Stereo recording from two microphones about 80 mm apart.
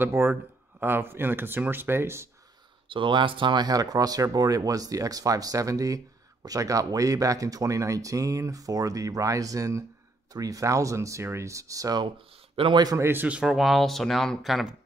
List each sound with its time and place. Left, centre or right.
0.0 s speech: right
2.9 s speech: right
3.6 s speech: right
12.6 s a man's voice: right
12.9 s speech: right
13.3 s speech: centre
13.6 s speech: centre